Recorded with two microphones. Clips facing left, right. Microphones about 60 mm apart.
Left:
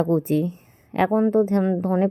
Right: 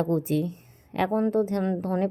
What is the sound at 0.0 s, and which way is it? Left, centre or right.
A woman's voice, left.